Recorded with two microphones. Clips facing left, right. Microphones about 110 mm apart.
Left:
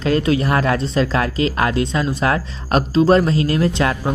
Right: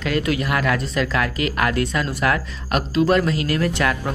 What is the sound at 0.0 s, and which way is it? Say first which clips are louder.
Speech: left 5 dB; 30° left (ahead or behind).